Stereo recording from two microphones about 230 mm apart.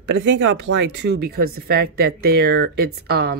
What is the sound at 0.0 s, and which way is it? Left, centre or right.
Speech, right.